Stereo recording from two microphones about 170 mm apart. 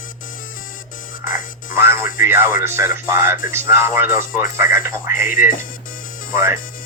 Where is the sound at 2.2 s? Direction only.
15° right (ahead or behind).